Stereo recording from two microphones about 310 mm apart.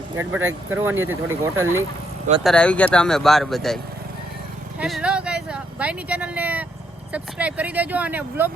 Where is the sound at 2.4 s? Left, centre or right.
Centre.